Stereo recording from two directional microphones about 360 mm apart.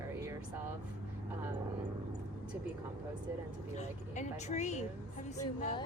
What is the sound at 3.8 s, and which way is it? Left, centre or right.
Speech, centre.